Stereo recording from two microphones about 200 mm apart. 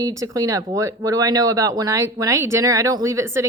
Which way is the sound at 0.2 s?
15° right (ahead or behind).